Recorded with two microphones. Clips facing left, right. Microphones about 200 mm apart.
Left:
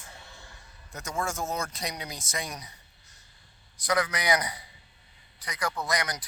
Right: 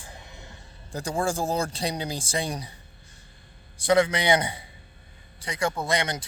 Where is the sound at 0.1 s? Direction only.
20° right (ahead or behind).